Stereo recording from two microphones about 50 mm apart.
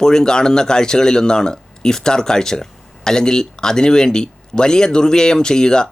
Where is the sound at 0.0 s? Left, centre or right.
Centre.